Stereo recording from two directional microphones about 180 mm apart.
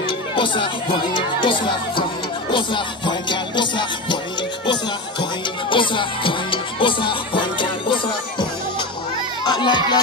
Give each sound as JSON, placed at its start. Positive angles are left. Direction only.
{"t": 0.0, "sound": "speech", "side_deg": 25}
{"t": 2.5, "sound": "music", "side_deg": 25}
{"t": 5.7, "sound": "music", "side_deg": 25}